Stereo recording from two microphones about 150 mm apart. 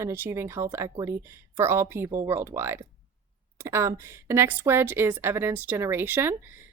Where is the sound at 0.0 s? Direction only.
15° right (ahead or behind).